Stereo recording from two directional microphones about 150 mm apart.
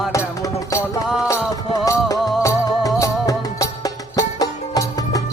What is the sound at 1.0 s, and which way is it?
Music, centre (ahead or behind).